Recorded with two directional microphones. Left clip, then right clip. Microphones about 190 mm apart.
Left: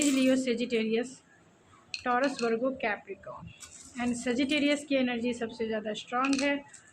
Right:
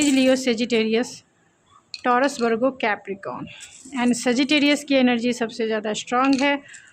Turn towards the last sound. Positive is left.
turn(degrees=-50)  # may be behind; listen again after turning